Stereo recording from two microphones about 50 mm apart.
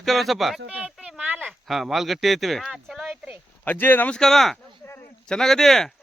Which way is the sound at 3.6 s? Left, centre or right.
Left.